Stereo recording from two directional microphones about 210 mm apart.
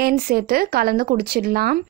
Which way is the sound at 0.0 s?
45° right (ahead or behind).